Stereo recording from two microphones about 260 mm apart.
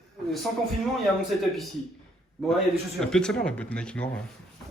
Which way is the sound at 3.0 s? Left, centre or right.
Centre.